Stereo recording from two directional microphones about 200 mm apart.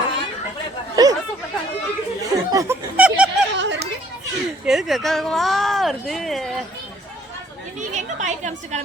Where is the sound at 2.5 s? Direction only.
15° right (ahead or behind).